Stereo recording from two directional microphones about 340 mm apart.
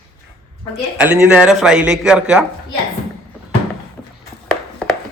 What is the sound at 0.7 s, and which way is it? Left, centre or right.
Speech, centre.